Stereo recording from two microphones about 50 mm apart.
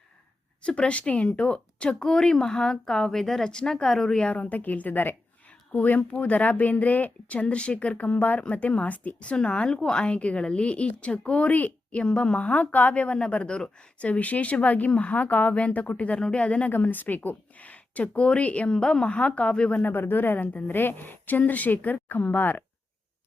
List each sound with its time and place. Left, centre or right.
0.6 s speech: left
4.3 s a woman's voice: left
12.0 s speech: centre
16.7 s a woman's voice: left
18.7 s speech: centre
19.8 s a woman's voice: left